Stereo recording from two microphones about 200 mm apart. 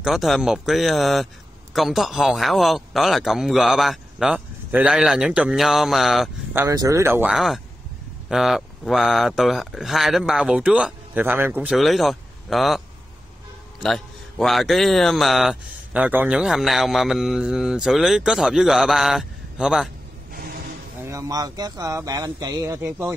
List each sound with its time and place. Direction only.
0.0 s a man's voice: centre (ahead or behind)
6.5 s a man's voice: 15° right (ahead or behind)
13.8 s a man's voice: centre (ahead or behind)
21.0 s speech: 15° right (ahead or behind)